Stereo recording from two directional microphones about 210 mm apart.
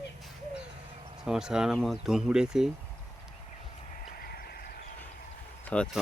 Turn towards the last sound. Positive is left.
turn(degrees=5)  # may be behind; listen again after turning